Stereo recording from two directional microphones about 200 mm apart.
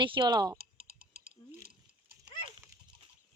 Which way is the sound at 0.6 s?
50° right (ahead or behind).